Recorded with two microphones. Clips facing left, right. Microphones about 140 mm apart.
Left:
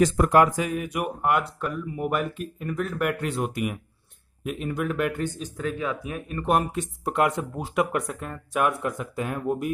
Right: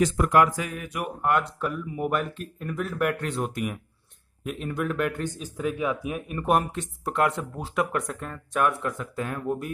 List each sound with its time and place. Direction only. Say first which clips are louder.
0.0 s speech: left 2 dB; 35° left (ahead or behind); by 1.5 s 10° left (ahead or behind)
1.6 s speech: even; centre (ahead or behind)
2.7 s speech: even; centre (ahead or behind)
5.6 s speech: right 2 dB; 10° right (ahead or behind)
6.5 s speech: even; 5° left (ahead or behind)